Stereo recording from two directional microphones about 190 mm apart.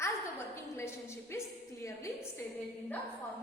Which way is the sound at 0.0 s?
15° left (ahead or behind).